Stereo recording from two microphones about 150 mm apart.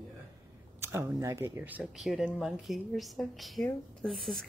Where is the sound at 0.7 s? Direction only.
15° right (ahead or behind).